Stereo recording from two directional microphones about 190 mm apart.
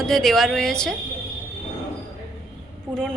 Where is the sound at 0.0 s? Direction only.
Centre (ahead or behind).